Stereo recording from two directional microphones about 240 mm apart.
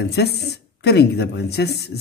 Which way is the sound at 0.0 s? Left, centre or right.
Left.